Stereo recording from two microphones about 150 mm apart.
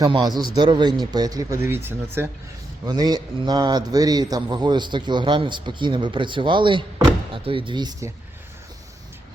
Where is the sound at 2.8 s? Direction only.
25° right (ahead or behind).